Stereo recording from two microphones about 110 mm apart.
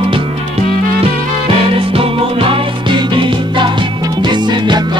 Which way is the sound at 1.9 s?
55° right (ahead or behind).